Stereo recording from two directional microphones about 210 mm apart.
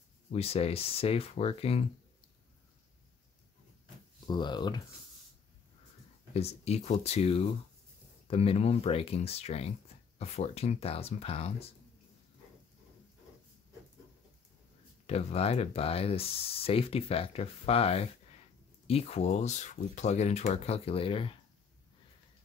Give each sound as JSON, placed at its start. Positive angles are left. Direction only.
{"t": 0.3, "sound": "speech", "side_deg": 30}
{"t": 4.3, "sound": "speech", "side_deg": 20}
{"t": 6.3, "sound": "speech", "side_deg": 30}
{"t": 15.0, "sound": "speech", "side_deg": 30}